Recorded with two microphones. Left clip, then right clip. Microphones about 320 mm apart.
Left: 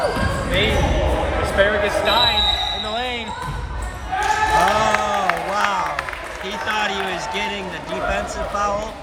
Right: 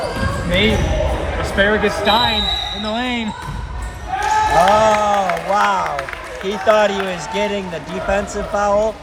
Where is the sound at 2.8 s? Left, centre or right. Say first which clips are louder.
Right 3 dB; right.